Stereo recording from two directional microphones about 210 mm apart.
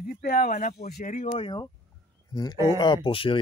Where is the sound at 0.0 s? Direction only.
40° left (ahead or behind).